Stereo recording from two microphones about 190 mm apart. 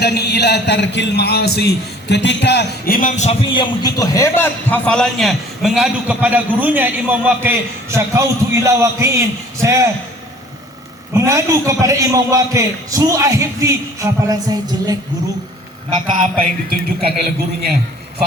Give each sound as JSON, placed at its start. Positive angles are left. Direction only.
{"t": 0.0, "sound": "a man's voice", "side_deg": 60}
{"t": 11.1, "sound": "a man's voice", "side_deg": -15}
{"t": 16.1, "sound": "music", "side_deg": -45}